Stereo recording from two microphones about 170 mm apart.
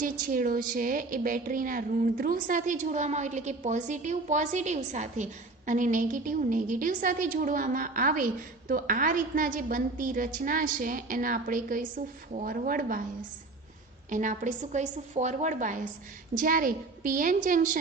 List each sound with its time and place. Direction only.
0.0 s a woman's voice: 55° right (ahead or behind)
14.1 s a woman's voice: 50° right (ahead or behind)